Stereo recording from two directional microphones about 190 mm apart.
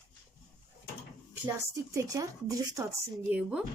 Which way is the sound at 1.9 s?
15° right (ahead or behind).